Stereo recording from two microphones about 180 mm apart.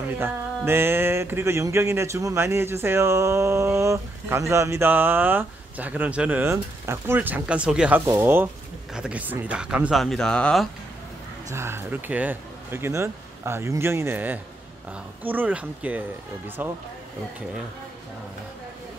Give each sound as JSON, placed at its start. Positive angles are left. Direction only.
{"t": 0.2, "sound": "speech", "side_deg": -10}
{"t": 11.5, "sound": "speech", "side_deg": -15}